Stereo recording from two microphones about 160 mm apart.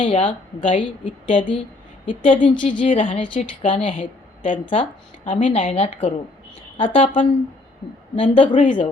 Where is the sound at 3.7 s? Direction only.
35° left (ahead or behind).